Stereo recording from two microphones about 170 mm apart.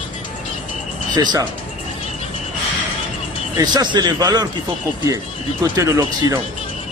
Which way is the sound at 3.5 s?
25° right (ahead or behind).